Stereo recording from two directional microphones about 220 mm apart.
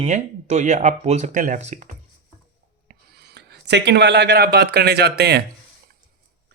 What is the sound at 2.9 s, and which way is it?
Speech, 45° right (ahead or behind).